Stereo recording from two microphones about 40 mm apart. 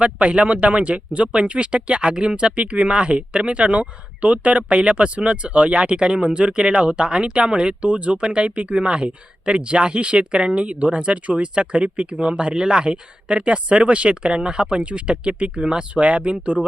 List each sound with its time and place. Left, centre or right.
0.0 s speech: right
16.0 s speech: right